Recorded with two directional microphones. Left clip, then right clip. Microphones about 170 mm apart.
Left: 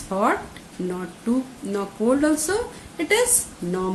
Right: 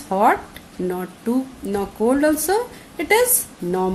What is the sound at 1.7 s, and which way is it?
Speech, 50° right (ahead or behind).